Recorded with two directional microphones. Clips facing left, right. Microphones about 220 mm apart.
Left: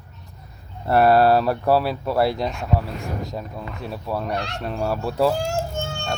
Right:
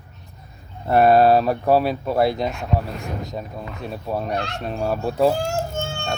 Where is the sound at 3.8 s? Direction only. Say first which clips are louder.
Right 1 dB; 20° right (ahead or behind).